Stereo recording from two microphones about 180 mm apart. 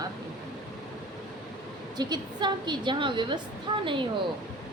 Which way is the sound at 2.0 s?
25° right (ahead or behind).